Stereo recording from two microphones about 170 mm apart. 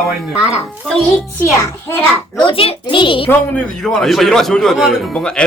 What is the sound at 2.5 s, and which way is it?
Speech, 30° left (ahead or behind).